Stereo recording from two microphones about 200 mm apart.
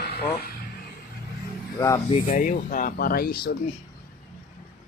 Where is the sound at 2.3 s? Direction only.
40° left (ahead or behind).